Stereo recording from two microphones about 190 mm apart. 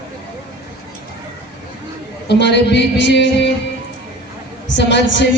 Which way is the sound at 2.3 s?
65° left (ahead or behind).